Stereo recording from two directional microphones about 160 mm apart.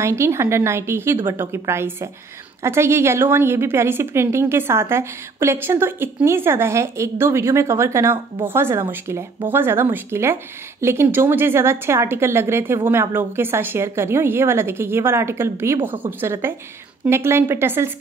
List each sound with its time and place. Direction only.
0.0 s speech: 15° right (ahead or behind)